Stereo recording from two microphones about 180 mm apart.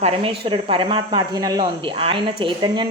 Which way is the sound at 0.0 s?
30° right (ahead or behind).